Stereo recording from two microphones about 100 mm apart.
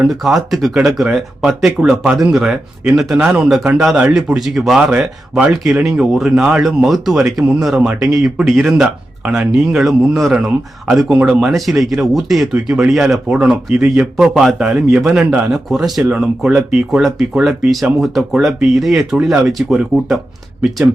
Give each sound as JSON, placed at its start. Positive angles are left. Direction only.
{"t": 0.1, "sound": "speech", "side_deg": 0}
{"t": 3.2, "sound": "speech", "side_deg": -20}
{"t": 3.4, "sound": "speech", "side_deg": -5}